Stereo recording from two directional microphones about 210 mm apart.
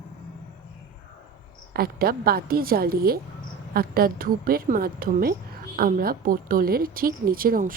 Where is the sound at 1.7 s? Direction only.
45° right (ahead or behind).